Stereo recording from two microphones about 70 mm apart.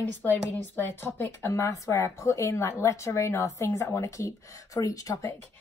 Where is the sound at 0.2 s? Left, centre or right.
Left.